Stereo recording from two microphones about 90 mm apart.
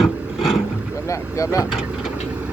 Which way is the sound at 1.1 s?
35° left (ahead or behind).